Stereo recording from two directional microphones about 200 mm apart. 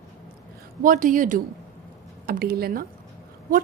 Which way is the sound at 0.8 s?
40° right (ahead or behind).